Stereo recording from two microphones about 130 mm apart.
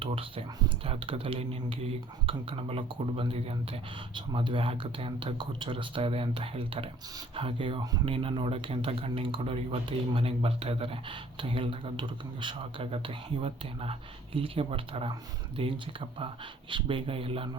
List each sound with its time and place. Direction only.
0.0 s speech: 45° right (ahead or behind)
14.3 s speech: 45° right (ahead or behind)